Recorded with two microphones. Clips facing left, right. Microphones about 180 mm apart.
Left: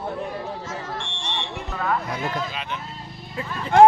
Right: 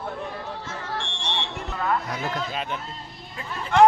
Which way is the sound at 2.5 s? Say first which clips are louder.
Right 2 dB; 40° right (ahead or behind).